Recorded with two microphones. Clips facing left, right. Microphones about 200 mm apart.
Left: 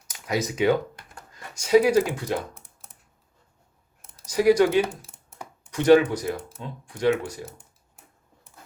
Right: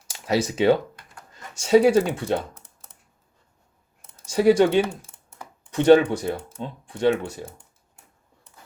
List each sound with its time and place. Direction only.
0.1 s speech: 30° right (ahead or behind)
4.3 s speech: 25° right (ahead or behind)